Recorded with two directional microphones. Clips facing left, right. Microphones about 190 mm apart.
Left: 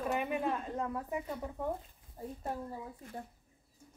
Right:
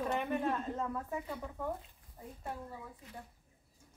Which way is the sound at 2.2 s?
30° left (ahead or behind).